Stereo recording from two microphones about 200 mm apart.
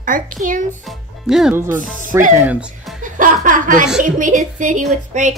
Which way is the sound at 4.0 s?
40° right (ahead or behind).